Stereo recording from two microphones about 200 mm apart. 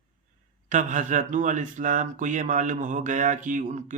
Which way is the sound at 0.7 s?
40° right (ahead or behind).